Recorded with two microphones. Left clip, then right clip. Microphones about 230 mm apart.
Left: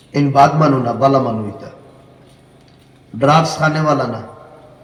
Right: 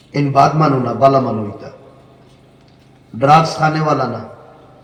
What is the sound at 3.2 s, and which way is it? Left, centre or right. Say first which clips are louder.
A man's voice: right 2 dB; left.